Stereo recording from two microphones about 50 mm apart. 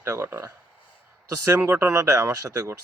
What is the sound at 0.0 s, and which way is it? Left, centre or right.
Speech, right.